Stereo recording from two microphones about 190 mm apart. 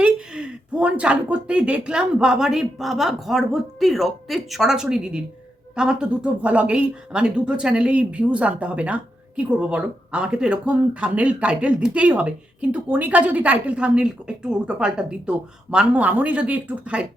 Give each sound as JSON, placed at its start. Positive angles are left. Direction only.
{"t": 0.0, "sound": "speech", "side_deg": -5}